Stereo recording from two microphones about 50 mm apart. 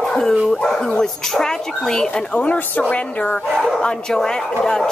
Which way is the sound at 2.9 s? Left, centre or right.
Left.